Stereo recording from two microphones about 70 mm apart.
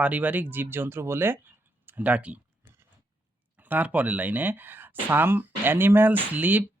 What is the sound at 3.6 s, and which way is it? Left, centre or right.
Speech, right.